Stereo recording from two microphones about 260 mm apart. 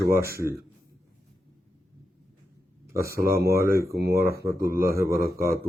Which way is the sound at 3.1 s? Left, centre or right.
Right.